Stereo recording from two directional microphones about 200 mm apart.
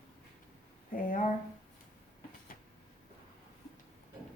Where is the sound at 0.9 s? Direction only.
45° left (ahead or behind).